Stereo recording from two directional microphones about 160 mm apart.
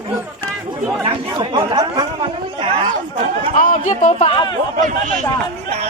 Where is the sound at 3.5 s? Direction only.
55° left (ahead or behind).